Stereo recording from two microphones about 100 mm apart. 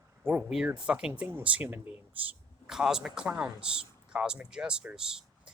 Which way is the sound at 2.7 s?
5° right (ahead or behind).